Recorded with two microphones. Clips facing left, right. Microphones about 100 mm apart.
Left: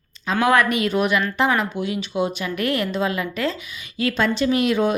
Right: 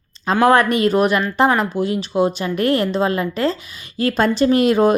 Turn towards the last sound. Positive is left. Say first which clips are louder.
# right 5 dB
turn(degrees=-40)  # may be behind; listen again after turning